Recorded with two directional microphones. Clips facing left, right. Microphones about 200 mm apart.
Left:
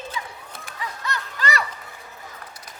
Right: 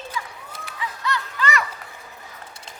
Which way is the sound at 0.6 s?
45° left (ahead or behind).